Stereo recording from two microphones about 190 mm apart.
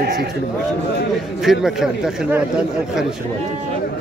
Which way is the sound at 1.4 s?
Centre (ahead or behind).